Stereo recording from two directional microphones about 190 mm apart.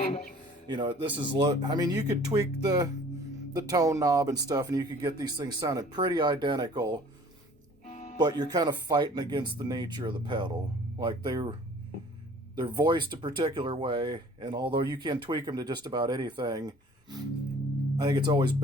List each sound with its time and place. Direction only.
0.7 s speech: 25° right (ahead or behind)
7.9 s music: 40° left (ahead or behind)
8.2 s speech: 20° right (ahead or behind)
12.5 s speech: 25° right (ahead or behind)
17.9 s speech: 25° right (ahead or behind)